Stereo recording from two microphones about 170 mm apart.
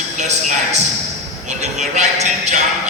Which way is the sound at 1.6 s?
45° right (ahead or behind).